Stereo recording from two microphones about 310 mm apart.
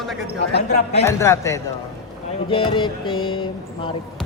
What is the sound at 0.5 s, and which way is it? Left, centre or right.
Speech, left.